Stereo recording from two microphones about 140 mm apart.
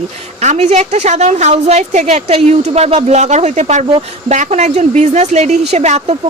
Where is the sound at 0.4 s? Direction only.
50° right (ahead or behind).